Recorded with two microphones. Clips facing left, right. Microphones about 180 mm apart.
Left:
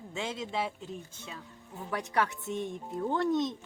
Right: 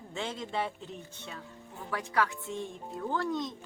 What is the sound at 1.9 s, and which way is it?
A woman's voice, 20° left (ahead or behind).